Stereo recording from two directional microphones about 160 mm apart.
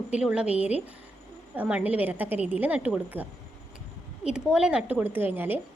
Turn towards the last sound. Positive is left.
turn(degrees=-10)  # may be behind; listen again after turning